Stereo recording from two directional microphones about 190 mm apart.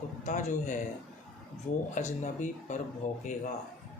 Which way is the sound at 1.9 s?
40° left (ahead or behind).